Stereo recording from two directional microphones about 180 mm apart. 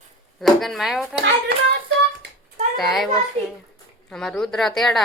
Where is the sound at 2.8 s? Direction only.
Centre (ahead or behind).